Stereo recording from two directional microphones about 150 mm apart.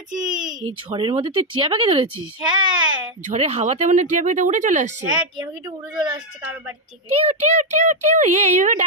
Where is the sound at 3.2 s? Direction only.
45° right (ahead or behind).